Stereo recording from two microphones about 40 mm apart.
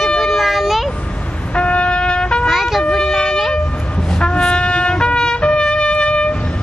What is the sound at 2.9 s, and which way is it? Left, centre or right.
Wind instrument, centre.